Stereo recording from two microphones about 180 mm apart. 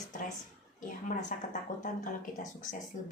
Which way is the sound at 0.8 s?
45° left (ahead or behind).